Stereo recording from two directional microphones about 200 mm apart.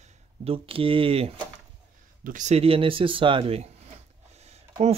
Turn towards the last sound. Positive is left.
turn(degrees=-35)  # may be behind; listen again after turning